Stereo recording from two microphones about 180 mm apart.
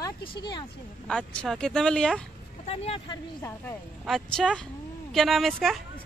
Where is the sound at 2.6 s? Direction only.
35° left (ahead or behind).